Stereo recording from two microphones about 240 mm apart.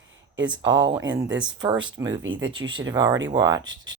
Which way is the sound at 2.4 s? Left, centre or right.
Right.